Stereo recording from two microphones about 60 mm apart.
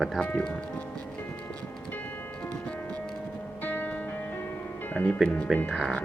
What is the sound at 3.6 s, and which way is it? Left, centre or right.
Music, left.